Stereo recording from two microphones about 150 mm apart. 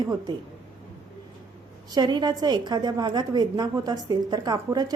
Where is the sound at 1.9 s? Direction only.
30° right (ahead or behind).